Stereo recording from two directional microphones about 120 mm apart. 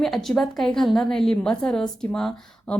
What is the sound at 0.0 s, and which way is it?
A woman's voice, centre (ahead or behind).